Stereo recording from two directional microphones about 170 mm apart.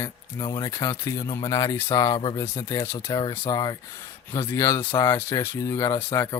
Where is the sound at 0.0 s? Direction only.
20° left (ahead or behind).